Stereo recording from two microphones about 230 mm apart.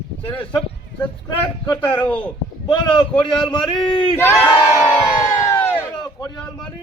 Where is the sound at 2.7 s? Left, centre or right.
Left.